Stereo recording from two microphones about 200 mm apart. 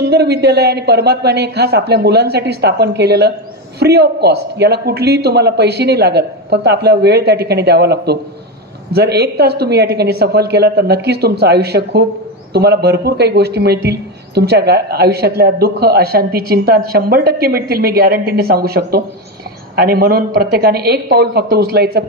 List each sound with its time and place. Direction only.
0.1 s a woman's voice: 55° right (ahead or behind)